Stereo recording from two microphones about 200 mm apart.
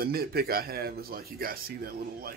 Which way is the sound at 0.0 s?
50° right (ahead or behind).